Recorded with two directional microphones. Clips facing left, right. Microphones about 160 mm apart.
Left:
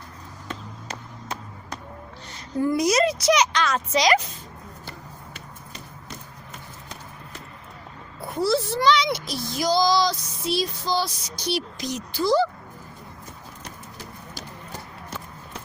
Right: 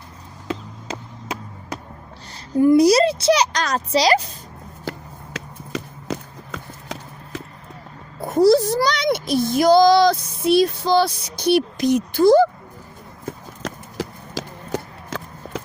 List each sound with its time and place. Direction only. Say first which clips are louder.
2.7 s speech: right 5 dB; 35° right (ahead or behind)
4.9 s run: right 14 dB; 90° right
8.2 s a child's voice: right 9 dB; 40° right (ahead or behind)
13.2 s clip-clop: right 15 dB; 90° right